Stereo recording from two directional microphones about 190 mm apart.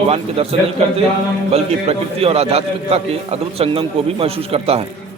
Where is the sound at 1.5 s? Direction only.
30° right (ahead or behind).